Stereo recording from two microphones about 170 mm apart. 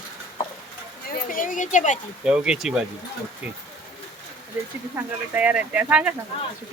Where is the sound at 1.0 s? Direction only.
60° left (ahead or behind).